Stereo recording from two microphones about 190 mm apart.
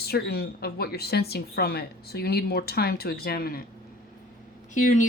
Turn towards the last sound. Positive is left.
turn(degrees=40)  # may be behind; listen again after turning